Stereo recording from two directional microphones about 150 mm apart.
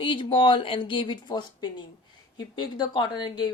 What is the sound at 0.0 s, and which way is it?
Speech, 35° left (ahead or behind).